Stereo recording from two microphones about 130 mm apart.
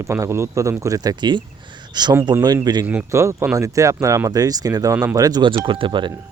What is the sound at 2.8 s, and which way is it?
Speech, 10° right (ahead or behind).